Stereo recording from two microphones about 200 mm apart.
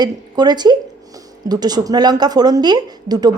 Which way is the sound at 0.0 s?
20° right (ahead or behind).